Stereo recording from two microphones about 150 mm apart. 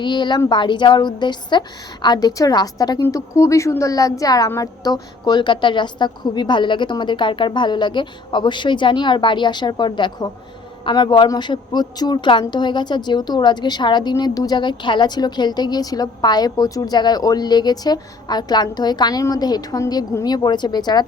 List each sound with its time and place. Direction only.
0.0 s a woman's voice: 30° left (ahead or behind)